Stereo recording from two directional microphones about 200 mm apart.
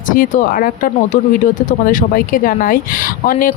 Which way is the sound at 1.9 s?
40° left (ahead or behind).